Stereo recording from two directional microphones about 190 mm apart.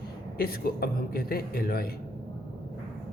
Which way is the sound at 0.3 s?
55° left (ahead or behind).